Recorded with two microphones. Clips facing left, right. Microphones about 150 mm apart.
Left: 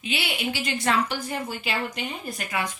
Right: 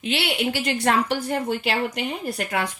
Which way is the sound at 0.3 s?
65° right (ahead or behind).